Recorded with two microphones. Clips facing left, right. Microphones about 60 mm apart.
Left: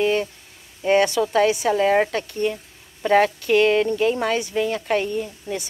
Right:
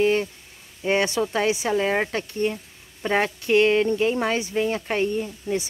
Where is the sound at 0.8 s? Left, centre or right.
Right.